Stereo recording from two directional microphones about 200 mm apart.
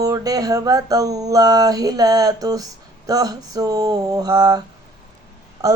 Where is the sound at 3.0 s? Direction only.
20° right (ahead or behind).